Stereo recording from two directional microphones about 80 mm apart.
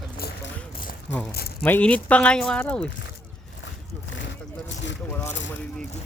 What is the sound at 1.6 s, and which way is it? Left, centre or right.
Speech, centre.